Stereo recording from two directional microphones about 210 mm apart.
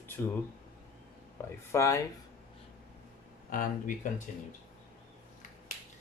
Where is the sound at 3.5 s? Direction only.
40° left (ahead or behind).